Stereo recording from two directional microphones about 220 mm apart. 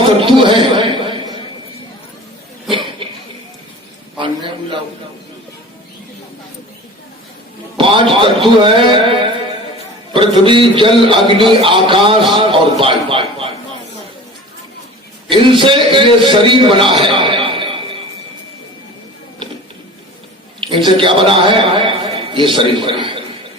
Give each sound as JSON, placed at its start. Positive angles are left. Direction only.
{"t": 0.2, "sound": "a sound", "side_deg": -25}
{"t": 2.6, "sound": "chuckle", "side_deg": -20}
{"t": 7.8, "sound": "a man's voice", "side_deg": -25}
{"t": 15.3, "sound": "a man's voice", "side_deg": -20}
{"t": 20.7, "sound": "a man's voice", "side_deg": -20}